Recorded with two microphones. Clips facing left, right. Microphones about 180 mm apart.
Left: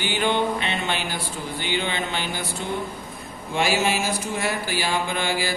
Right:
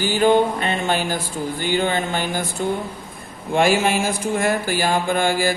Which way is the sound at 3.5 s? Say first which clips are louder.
Right 5 dB; 50° right (ahead or behind).